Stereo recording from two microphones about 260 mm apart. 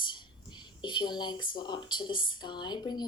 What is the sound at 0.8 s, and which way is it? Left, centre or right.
Speech, centre.